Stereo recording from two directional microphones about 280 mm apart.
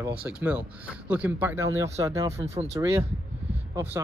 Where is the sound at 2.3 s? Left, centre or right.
Right.